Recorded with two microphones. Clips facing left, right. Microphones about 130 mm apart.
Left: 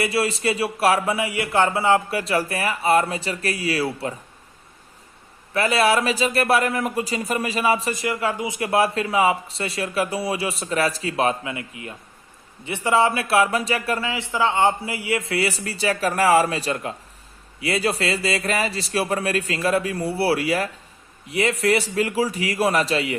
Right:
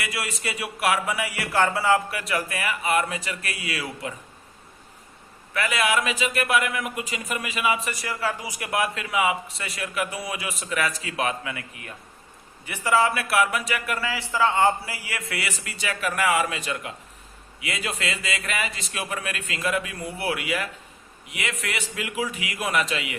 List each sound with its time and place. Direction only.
0.0 s a man's voice: 30° left (ahead or behind)
5.5 s a man's voice: 35° left (ahead or behind)
7.9 s a man's voice: 25° left (ahead or behind)